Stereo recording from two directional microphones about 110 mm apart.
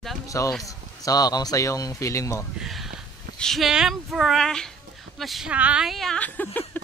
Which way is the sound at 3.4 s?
Centre (ahead or behind).